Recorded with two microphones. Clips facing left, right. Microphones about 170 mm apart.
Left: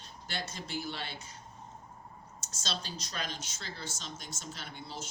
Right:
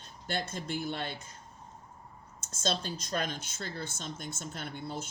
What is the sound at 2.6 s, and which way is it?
Speech, 50° right (ahead or behind).